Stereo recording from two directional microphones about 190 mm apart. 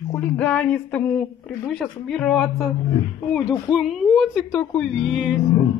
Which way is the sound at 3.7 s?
Centre (ahead or behind).